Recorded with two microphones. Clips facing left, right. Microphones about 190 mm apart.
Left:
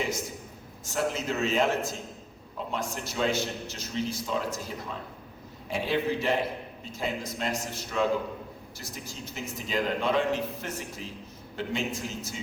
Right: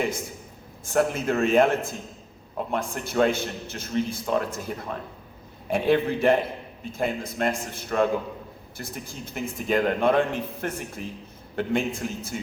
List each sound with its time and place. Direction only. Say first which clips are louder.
0.9 s a man's voice: right 6 dB; 55° right (ahead or behind)